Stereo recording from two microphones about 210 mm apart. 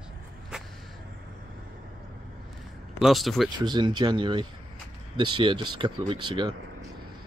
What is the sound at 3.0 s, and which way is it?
Speech, centre (ahead or behind).